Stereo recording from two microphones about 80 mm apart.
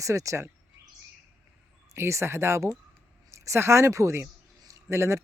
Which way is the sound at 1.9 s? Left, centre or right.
Right.